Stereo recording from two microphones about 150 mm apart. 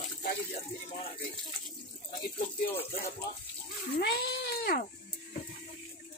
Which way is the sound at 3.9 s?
90° left.